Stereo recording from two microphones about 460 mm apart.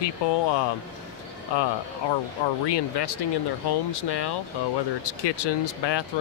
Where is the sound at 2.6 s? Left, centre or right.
Left.